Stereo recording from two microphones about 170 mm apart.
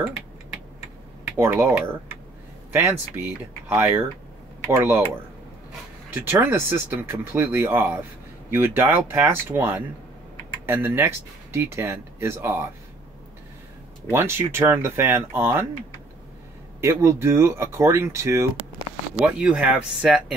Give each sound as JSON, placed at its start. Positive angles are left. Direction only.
{"t": 1.3, "sound": "speech", "side_deg": -15}
{"t": 6.4, "sound": "speech", "side_deg": -15}
{"t": 14.0, "sound": "speech", "side_deg": -15}
{"t": 16.8, "sound": "speech", "side_deg": -15}